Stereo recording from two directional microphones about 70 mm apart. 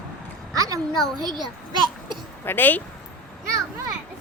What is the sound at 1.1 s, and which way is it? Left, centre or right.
Speech, right.